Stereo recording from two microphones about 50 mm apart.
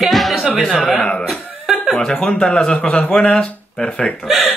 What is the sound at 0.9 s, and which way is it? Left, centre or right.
A man's voice, left.